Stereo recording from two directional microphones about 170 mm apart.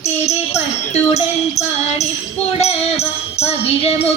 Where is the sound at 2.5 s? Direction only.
40° left (ahead or behind).